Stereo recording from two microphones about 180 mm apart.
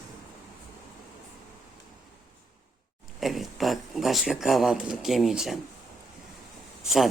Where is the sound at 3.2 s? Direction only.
Centre (ahead or behind).